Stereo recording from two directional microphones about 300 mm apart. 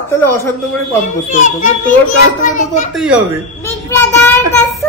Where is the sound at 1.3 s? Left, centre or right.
Left.